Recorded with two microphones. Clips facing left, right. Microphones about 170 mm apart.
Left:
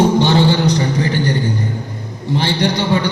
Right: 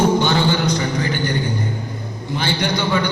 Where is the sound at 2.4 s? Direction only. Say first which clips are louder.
Left 3 dB; 35° left (ahead or behind).